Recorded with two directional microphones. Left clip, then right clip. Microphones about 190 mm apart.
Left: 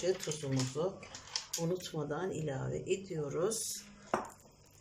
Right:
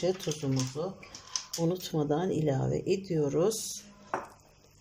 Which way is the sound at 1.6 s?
25° right (ahead or behind).